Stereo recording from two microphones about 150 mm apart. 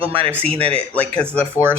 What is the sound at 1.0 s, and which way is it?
Speech, 5° left (ahead or behind).